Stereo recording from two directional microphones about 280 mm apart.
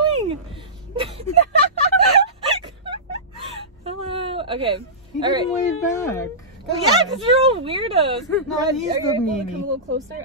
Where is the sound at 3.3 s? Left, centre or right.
Centre.